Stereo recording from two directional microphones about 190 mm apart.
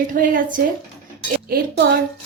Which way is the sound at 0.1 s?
45° right (ahead or behind).